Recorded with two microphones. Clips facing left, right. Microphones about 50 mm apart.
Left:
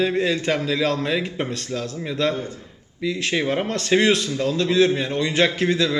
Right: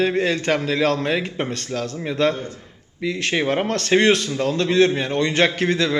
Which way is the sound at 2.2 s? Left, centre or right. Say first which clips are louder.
Right 3 dB; centre.